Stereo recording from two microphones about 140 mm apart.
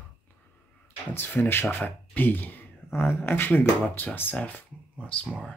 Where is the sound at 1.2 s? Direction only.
15° left (ahead or behind).